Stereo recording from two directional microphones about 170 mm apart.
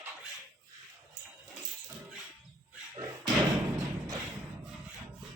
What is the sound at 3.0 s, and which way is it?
Slam, 20° right (ahead or behind).